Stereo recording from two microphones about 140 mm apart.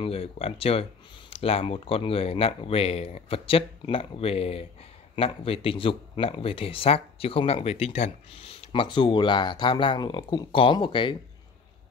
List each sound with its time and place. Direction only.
0.0 s speech: 45° left (ahead or behind)